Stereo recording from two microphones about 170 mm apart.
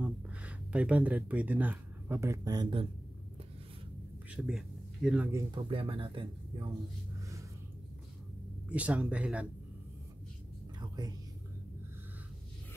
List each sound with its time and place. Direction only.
0.0 s speech: 5° right (ahead or behind); by 2.9 s 25° right (ahead or behind)
4.3 s speech: 5° right (ahead or behind)
5.5 s speech: 30° right (ahead or behind)
7.2 s music: 20° right (ahead or behind)
8.6 s speech: 10° right (ahead or behind)
10.8 s whispering: 25° right (ahead or behind)